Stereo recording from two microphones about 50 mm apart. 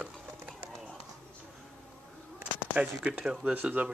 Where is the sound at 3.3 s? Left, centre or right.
Centre.